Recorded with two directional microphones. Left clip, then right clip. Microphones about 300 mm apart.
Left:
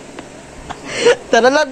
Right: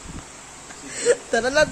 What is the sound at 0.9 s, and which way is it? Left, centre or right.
Whimper, centre.